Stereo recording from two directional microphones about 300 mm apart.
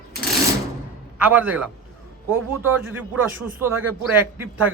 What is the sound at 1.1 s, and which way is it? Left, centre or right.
Speech, centre.